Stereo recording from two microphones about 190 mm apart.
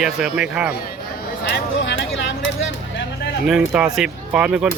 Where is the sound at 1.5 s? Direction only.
75° left (ahead or behind).